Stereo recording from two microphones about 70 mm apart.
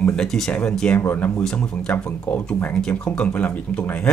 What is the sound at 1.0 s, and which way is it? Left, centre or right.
Speech, left.